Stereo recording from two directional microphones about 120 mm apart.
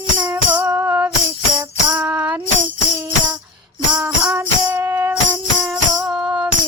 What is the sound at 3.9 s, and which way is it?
Music, 10° right (ahead or behind).